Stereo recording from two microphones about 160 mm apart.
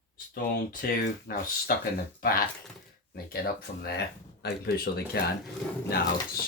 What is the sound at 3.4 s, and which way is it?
Speech, 85° left.